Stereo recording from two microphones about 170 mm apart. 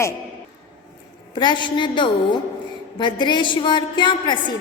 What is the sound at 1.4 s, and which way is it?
A woman's voice, 25° left (ahead or behind).